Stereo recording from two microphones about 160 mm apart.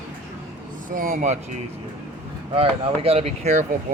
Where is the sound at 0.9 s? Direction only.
55° right (ahead or behind).